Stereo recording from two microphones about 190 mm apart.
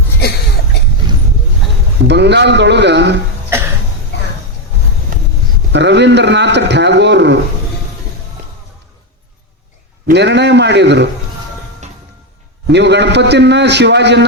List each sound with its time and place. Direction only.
2.0 s a man's voice: 65° right (ahead or behind)
4.1 s music: 65° left (ahead or behind)
5.7 s a man's voice: 65° right (ahead or behind)
10.1 s a man's voice: 65° right (ahead or behind)
12.6 s a man's voice: 65° right (ahead or behind)